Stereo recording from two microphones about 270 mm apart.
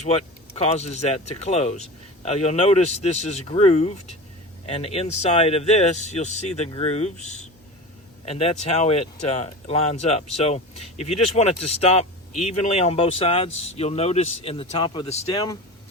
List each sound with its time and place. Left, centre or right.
0.0 s speech: left